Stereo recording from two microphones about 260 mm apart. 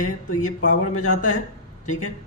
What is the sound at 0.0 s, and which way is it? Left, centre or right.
A man's voice, left.